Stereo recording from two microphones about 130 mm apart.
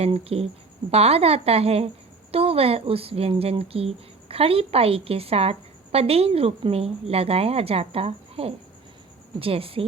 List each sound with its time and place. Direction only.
0.0 s speech: 50° right (ahead or behind)